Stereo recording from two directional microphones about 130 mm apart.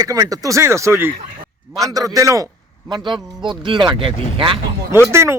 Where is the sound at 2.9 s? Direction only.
35° right (ahead or behind).